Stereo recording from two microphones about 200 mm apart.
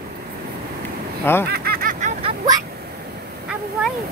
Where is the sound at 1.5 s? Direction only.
50° right (ahead or behind).